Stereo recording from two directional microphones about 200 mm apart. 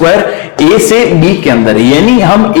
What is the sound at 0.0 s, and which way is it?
Speech, 15° left (ahead or behind).